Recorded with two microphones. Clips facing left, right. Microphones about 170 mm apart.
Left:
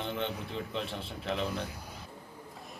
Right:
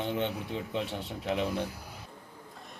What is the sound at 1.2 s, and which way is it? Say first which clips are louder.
Speech: right 3 dB; 10° right (ahead or behind).